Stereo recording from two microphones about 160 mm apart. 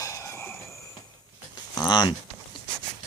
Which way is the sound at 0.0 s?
20° left (ahead or behind).